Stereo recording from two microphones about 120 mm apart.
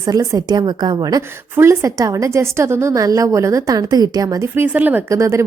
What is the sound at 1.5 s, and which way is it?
A woman's voice, 25° right (ahead or behind).